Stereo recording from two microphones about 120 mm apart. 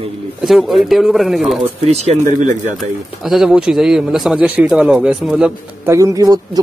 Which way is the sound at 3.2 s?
5° right (ahead or behind).